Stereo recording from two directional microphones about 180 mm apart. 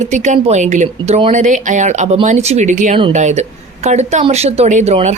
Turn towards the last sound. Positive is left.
turn(degrees=-35)  # may be behind; listen again after turning